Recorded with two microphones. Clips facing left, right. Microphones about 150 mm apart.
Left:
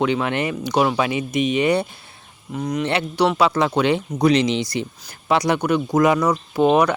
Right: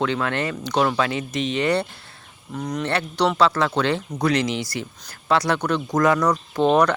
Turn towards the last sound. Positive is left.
turn(degrees=10)  # may be behind; listen again after turning